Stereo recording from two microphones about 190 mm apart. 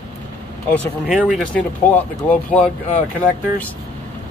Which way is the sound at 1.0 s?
Centre (ahead or behind).